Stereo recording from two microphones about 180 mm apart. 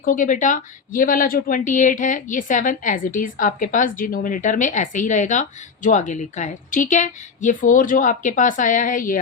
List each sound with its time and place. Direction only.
0.0 s speech: 45° left (ahead or behind)